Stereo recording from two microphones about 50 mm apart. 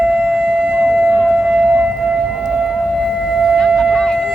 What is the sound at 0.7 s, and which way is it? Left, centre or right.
Civil defense siren, right.